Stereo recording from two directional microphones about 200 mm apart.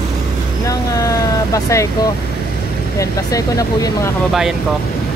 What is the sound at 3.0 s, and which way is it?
Speech, 15° left (ahead or behind).